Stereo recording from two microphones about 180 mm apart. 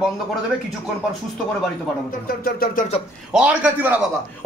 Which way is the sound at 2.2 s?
55° left (ahead or behind).